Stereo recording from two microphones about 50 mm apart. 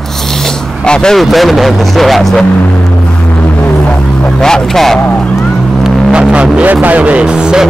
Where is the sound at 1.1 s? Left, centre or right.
Centre.